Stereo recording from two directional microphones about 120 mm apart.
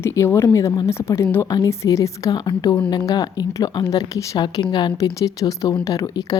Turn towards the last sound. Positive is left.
turn(degrees=30)  # may be behind; listen again after turning